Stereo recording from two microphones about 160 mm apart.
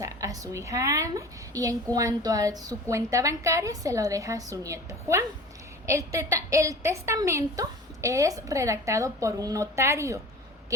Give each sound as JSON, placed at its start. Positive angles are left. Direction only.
{"t": 0.0, "sound": "a woman's voice", "side_deg": -20}